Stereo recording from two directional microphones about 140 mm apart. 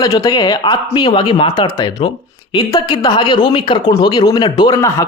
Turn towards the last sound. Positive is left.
turn(degrees=30)  # may be behind; listen again after turning